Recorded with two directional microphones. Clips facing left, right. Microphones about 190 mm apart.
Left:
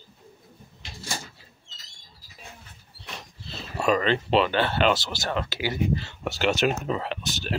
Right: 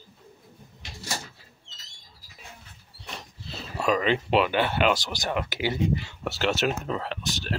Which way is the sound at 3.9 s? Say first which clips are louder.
Left 1 dB; 10° right (ahead or behind).